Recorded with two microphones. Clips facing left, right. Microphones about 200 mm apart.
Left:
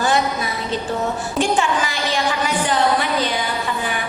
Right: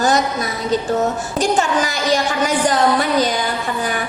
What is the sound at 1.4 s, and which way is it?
A woman's voice, 40° right (ahead or behind).